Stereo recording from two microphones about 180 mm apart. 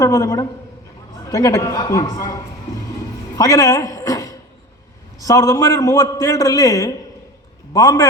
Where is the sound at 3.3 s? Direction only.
20° left (ahead or behind).